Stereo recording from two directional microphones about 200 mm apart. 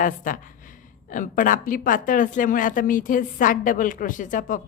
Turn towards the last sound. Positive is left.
turn(degrees=40)  # may be behind; listen again after turning